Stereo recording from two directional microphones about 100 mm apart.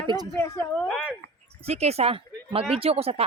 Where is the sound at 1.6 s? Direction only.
90° right.